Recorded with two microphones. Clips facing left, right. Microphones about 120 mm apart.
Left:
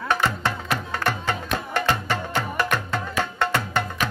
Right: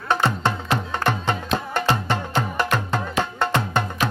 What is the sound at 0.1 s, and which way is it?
Music, 25° right (ahead or behind).